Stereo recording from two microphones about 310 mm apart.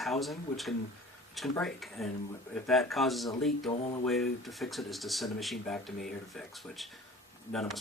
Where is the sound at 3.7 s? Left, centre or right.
Centre.